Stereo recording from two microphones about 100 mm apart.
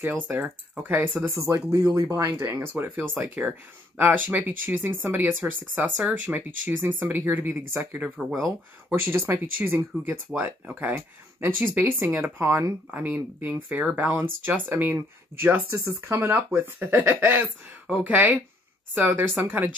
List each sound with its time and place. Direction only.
0.3 s speech: 20° right (ahead or behind)
1.4 s speech: 35° right (ahead or behind)
2.3 s speech: 25° right (ahead or behind)
3.3 s speech: 10° right (ahead or behind)
4.0 s speech: 20° right (ahead or behind)